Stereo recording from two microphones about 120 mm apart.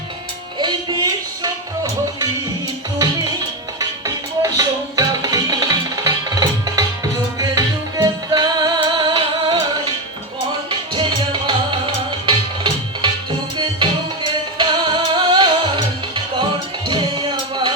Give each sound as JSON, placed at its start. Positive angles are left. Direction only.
{"t": 0.6, "sound": "music", "side_deg": -40}
{"t": 3.0, "sound": "music", "side_deg": -30}
{"t": 10.7, "sound": "music", "side_deg": -45}
{"t": 14.6, "sound": "music", "side_deg": -40}